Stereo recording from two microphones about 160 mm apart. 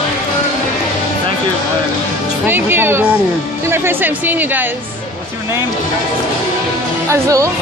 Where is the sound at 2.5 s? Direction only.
15° right (ahead or behind).